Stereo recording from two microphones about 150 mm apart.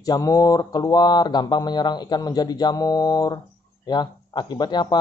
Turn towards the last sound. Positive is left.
turn(degrees=30)  # may be behind; listen again after turning